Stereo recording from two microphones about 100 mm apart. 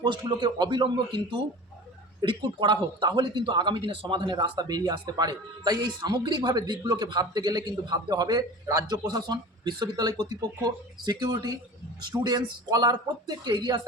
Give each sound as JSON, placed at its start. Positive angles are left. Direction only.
{"t": 0.0, "sound": "speech", "side_deg": -50}